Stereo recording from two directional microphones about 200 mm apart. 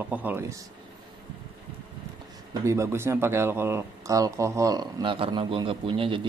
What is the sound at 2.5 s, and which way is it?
Speech, 15° right (ahead or behind).